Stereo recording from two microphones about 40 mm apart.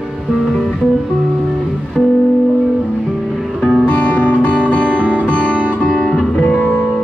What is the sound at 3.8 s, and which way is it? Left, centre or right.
Music, left.